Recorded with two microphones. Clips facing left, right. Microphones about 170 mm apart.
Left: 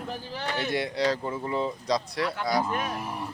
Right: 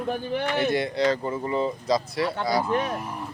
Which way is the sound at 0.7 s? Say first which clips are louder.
Right 3 dB; centre (ahead or behind).